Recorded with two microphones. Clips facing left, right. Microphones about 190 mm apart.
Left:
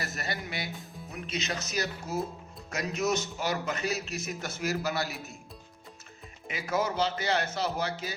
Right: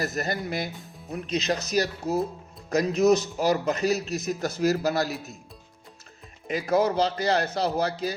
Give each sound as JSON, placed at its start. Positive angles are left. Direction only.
{"t": 0.0, "sound": "a man's voice", "side_deg": -40}
{"t": 6.5, "sound": "a man's voice", "side_deg": -35}